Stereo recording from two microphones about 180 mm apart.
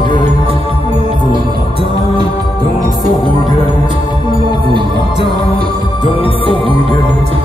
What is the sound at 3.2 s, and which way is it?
Music, 25° left (ahead or behind).